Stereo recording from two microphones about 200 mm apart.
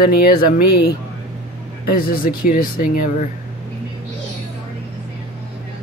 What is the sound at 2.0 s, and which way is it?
Speech, 50° left (ahead or behind).